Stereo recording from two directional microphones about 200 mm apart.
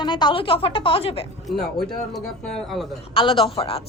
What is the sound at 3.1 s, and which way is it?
Speech, 25° left (ahead or behind).